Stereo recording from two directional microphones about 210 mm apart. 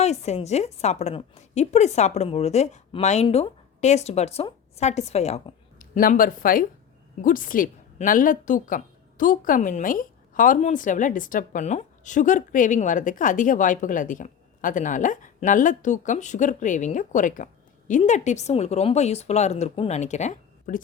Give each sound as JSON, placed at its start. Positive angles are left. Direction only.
{"t": 0.0, "sound": "a woman's voice", "side_deg": 30}